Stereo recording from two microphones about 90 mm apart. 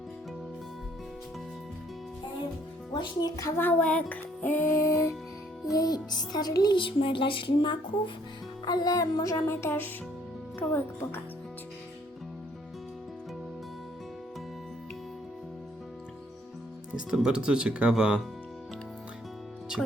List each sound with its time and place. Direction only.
2.9 s speech: 50° left (ahead or behind)
3.6 s speech: 20° left (ahead or behind)
4.1 s music: 20° left (ahead or behind)
5.7 s music: 45° left (ahead or behind); by 8.1 s 65° left (ahead or behind)
8.6 s music: 45° left (ahead or behind); by 10.8 s 20° left (ahead or behind)
16.9 s speech: 10° right (ahead or behind)